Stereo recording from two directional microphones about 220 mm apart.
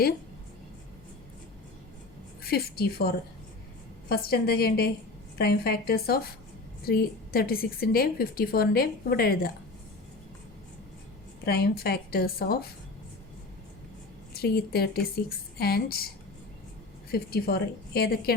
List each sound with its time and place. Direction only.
2.4 s a woman's voice: 45° left (ahead or behind)
4.1 s a woman's voice: 45° left (ahead or behind)
11.4 s a woman's voice: 45° left (ahead or behind)
14.3 s a woman's voice: 45° left (ahead or behind)
17.1 s a woman's voice: 45° left (ahead or behind)